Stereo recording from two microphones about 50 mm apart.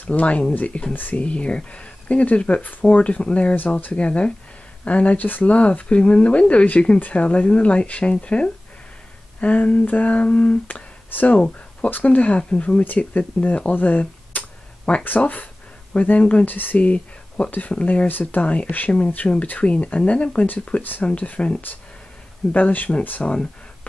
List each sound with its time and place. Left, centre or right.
0.0 s speech: left
1.2 s speech: left
3.5 s speech: left
3.9 s speech: left
11.1 s speech: left
11.3 s speech: left
16.4 s speech: left
16.8 s speech: left
18.0 s speech: left